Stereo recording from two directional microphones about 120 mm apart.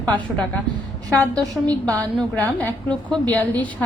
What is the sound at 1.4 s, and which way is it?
Speech, 30° right (ahead or behind).